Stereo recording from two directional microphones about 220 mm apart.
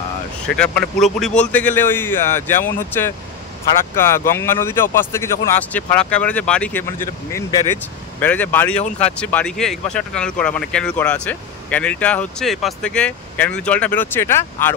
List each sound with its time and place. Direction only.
0.6 s a man's voice: 5° left (ahead or behind)